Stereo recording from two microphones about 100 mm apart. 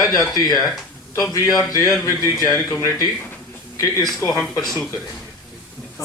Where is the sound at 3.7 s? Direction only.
35° left (ahead or behind).